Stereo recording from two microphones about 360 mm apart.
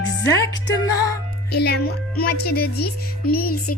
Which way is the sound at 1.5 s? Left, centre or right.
Left.